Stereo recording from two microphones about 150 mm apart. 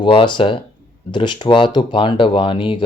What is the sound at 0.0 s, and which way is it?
Speech, 35° left (ahead or behind).